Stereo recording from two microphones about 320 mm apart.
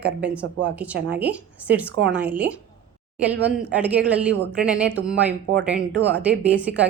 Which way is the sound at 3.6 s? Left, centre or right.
Centre.